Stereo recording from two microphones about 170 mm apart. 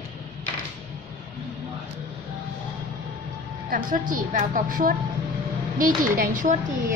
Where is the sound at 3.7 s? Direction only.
50° right (ahead or behind).